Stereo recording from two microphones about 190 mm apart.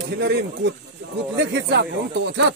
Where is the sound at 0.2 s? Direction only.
65° right (ahead or behind).